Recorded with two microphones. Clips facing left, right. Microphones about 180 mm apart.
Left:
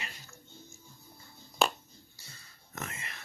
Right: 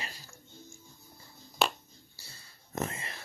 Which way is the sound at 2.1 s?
35° right (ahead or behind).